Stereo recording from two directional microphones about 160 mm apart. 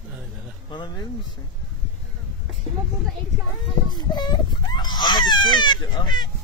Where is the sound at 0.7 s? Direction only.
30° left (ahead or behind).